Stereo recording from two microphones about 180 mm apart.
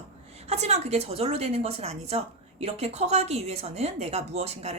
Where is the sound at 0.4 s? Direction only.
35° right (ahead or behind).